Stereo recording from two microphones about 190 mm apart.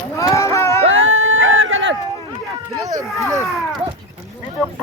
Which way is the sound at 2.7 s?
20° right (ahead or behind).